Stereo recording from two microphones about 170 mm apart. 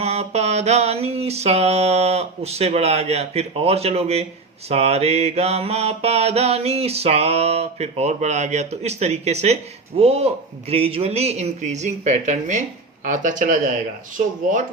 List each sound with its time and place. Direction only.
0.0 s mantra: 40° right (ahead or behind)
13.1 s speech: 50° right (ahead or behind)